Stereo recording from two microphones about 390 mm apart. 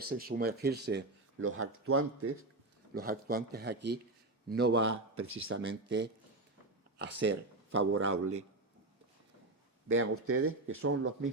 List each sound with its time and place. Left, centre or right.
0.0 s speech: right
2.9 s speech: right
5.2 s speech: right
5.5 s speech: right
9.9 s speech: right